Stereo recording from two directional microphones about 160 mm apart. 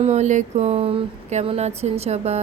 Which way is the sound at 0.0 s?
45° right (ahead or behind).